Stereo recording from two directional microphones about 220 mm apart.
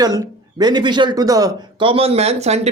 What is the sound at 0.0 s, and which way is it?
Speech, 15° right (ahead or behind).